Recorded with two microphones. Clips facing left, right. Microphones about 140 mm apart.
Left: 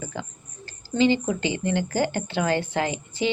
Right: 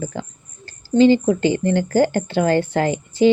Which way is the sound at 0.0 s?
40° right (ahead or behind).